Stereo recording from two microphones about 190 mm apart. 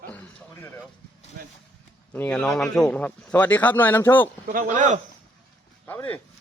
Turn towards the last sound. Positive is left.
turn(degrees=10)  # may be behind; listen again after turning